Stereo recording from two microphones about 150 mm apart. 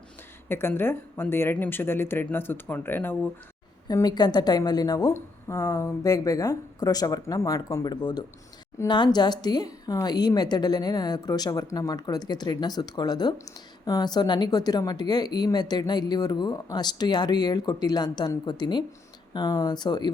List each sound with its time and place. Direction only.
0.4 s speech: 15° left (ahead or behind)
3.8 s a woman's voice: 25° left (ahead or behind)